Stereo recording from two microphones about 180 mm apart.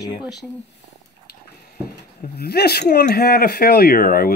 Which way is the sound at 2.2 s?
60° left (ahead or behind).